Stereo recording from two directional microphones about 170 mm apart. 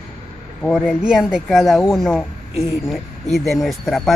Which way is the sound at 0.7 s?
Centre (ahead or behind).